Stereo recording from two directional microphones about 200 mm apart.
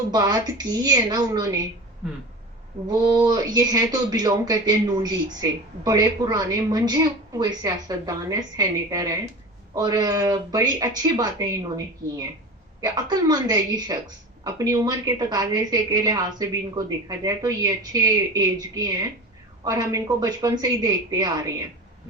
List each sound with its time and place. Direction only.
0.1 s speech: 20° right (ahead or behind)
2.8 s speech: 20° right (ahead or behind)